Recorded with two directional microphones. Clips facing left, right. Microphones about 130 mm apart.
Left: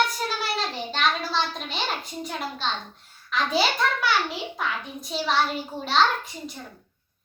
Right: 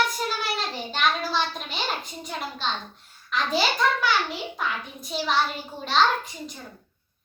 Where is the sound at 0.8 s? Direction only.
5° right (ahead or behind).